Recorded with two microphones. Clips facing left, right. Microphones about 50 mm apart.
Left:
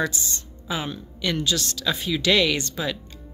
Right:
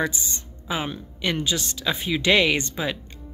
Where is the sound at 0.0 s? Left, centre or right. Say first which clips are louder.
Even; right.